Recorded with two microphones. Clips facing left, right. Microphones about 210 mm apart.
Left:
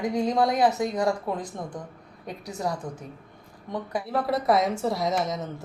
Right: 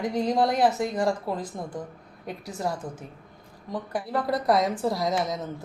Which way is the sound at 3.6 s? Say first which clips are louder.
Even; 5° right (ahead or behind).